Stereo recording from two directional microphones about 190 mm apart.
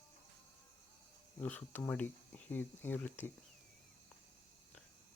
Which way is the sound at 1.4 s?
10° left (ahead or behind).